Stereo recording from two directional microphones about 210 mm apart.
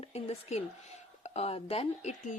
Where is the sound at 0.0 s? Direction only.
30° left (ahead or behind).